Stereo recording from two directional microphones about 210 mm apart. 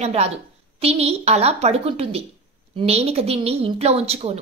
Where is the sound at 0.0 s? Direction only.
30° right (ahead or behind).